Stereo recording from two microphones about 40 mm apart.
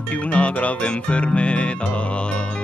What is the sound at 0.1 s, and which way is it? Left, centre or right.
Music, left.